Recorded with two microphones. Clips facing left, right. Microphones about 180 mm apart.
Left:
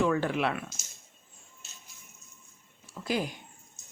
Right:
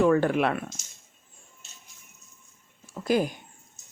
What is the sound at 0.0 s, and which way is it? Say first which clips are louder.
Speech: right 6 dB; 50° right (ahead or behind).